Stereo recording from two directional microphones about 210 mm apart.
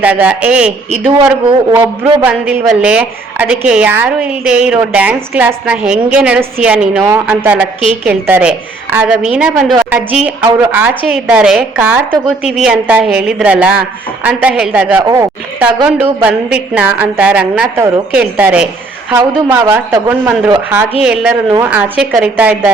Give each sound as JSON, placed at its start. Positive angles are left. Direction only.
{"t": 0.0, "sound": "a woman's voice", "side_deg": -5}
{"t": 1.7, "sound": "a man's voice", "side_deg": -20}
{"t": 2.2, "sound": "a woman's voice", "side_deg": -5}